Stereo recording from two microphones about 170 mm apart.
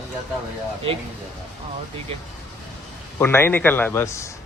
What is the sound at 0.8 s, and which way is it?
Speech, 35° right (ahead or behind).